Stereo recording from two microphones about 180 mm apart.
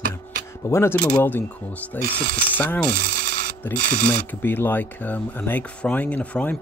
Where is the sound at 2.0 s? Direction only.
55° right (ahead or behind).